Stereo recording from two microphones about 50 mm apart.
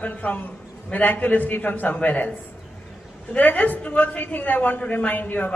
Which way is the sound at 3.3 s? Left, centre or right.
Left.